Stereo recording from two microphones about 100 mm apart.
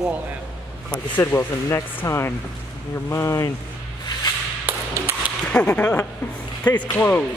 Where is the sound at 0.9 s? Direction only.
25° left (ahead or behind).